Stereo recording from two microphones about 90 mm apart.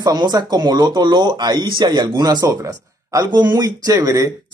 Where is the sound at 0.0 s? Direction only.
50° right (ahead or behind).